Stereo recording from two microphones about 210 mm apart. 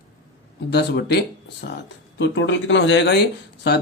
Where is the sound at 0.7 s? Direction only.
55° left (ahead or behind).